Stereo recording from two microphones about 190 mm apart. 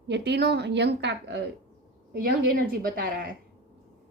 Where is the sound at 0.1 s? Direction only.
60° right (ahead or behind).